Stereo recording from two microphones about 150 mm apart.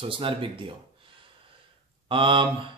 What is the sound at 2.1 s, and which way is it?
Speech, 35° right (ahead or behind).